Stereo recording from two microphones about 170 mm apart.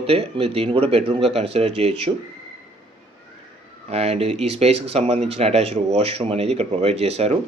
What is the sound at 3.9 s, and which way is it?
Speech, 40° right (ahead or behind).